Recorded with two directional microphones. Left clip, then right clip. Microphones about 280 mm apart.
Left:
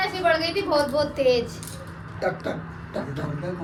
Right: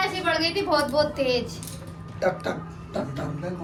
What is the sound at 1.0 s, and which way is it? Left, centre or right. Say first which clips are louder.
Speech: left 2 dB; centre.